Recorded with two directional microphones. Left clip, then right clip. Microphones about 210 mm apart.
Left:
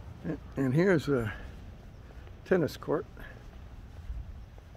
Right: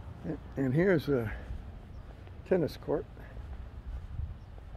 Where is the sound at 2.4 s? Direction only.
25° left (ahead or behind).